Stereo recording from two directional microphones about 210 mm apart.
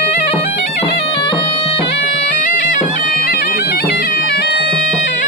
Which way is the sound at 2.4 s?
40° left (ahead or behind).